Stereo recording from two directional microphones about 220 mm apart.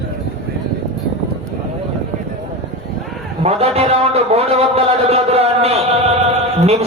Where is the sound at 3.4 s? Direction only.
25° right (ahead or behind).